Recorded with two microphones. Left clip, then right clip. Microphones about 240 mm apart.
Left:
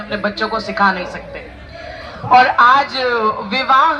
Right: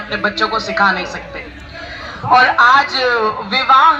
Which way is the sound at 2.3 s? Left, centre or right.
Centre.